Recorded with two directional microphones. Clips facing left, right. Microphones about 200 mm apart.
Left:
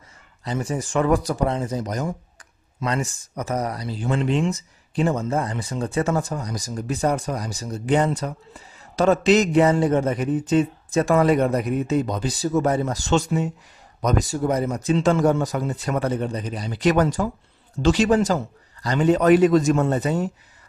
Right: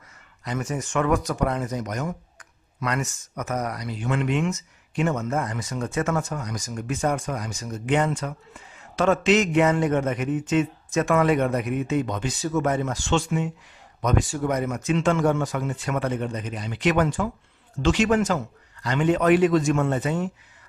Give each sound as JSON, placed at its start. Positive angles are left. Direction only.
{"t": 0.4, "sound": "speech", "side_deg": 30}